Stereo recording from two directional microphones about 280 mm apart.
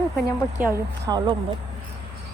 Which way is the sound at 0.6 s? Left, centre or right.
Centre.